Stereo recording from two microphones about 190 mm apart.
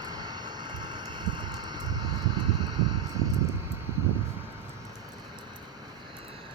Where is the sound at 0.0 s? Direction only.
20° right (ahead or behind).